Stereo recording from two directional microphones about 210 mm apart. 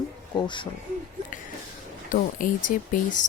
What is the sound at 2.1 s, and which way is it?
Speech, 40° left (ahead or behind).